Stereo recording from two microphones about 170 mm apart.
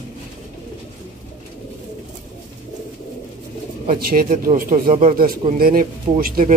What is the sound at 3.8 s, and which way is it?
Speech, 60° right (ahead or behind).